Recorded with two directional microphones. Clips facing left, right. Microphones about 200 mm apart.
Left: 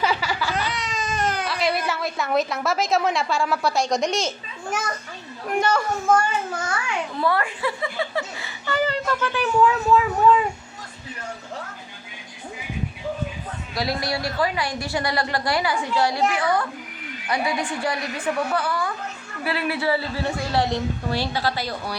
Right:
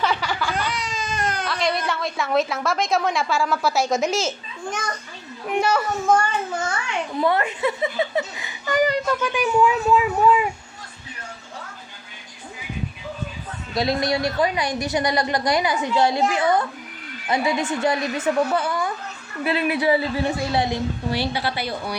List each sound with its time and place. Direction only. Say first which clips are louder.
0.0 s baby cry: even; 5° left (ahead or behind)
5.5 s speech: right 1 dB; 5° right (ahead or behind)
7.2 s speech: right 3 dB; 20° right (ahead or behind)
13.7 s a woman's voice: right 4 dB; 20° right (ahead or behind)